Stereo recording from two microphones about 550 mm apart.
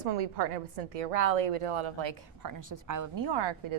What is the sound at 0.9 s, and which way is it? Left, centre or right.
A woman's voice, right.